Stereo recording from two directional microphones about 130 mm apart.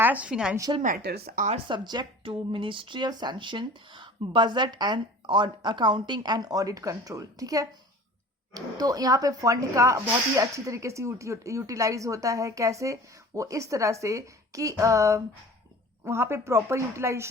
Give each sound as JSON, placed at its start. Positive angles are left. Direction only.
{"t": 0.0, "sound": "a woman's voice", "side_deg": -10}
{"t": 1.5, "sound": "speech", "side_deg": -40}